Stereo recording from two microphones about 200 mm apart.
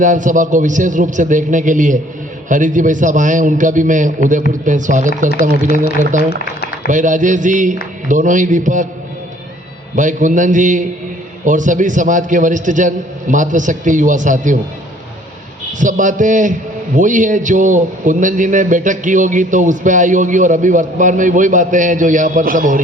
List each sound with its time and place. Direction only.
0.0 s a man's voice: 40° right (ahead or behind)
9.9 s a man's voice: 40° right (ahead or behind)
15.8 s a man's voice: 40° right (ahead or behind)